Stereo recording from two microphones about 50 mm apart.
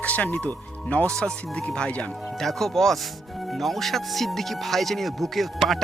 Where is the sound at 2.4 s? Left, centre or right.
Centre.